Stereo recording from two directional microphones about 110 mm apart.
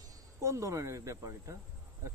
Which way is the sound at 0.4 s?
30° right (ahead or behind).